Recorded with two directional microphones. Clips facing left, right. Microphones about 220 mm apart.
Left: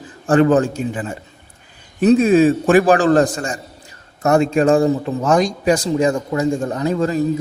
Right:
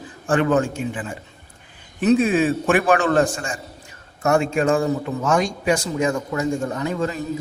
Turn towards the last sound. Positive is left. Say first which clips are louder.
# left 5 dB
turn(degrees=35)  # may be behind; listen again after turning